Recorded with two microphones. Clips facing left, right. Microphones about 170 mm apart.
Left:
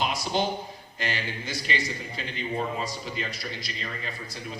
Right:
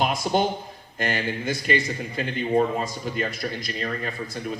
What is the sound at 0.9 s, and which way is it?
A man's voice, 50° right (ahead or behind).